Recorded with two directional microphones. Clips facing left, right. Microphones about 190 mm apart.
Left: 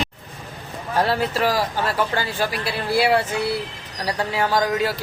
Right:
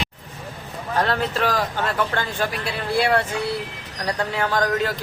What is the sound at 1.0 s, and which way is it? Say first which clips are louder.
A man's voice: left 2 dB; 10° left (ahead or behind).